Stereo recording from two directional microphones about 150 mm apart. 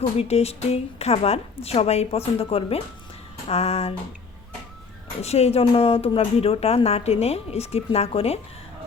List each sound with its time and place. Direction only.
0.2 s speech: 45° left (ahead or behind)
5.2 s speech: 45° left (ahead or behind)